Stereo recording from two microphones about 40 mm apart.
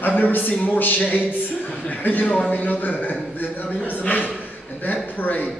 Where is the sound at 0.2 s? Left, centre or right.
Left.